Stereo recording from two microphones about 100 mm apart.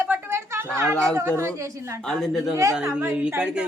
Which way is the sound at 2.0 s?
5° left (ahead or behind).